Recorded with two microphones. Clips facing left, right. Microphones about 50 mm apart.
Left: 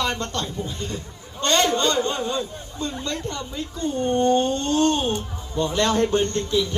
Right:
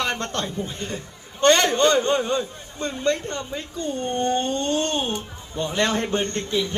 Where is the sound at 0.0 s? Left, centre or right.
Right.